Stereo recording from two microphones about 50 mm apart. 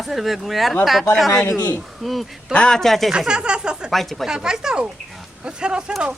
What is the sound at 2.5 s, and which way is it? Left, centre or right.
Speech, left.